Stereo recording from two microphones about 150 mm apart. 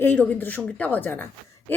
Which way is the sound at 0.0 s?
10° left (ahead or behind).